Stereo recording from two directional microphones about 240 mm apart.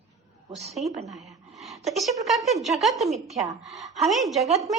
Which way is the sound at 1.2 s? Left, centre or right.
Centre.